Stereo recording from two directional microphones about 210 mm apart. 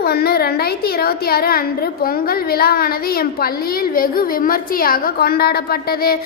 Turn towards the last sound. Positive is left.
turn(degrees=45)  # may be behind; listen again after turning